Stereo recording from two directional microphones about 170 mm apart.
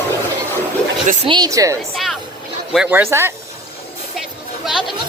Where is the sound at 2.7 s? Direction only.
10° right (ahead or behind).